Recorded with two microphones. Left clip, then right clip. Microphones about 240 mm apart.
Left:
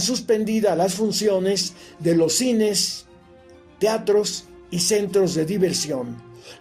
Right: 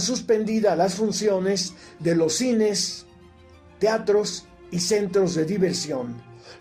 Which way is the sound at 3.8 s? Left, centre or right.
Left.